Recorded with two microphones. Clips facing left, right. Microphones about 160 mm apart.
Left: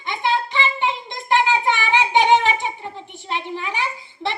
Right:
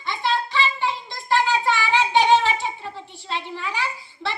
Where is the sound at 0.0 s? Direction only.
15° left (ahead or behind).